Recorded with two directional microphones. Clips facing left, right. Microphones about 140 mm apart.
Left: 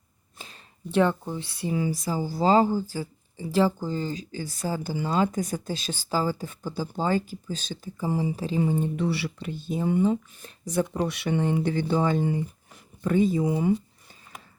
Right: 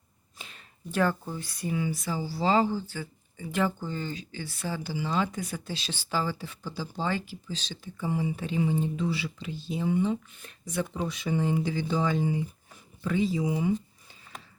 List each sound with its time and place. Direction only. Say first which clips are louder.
0.3 s speech: left 2 dB; 35° left (ahead or behind)
10.9 s speech: left 3 dB; 70° left (ahead or behind); by 13.7 s 50° left (ahead or behind)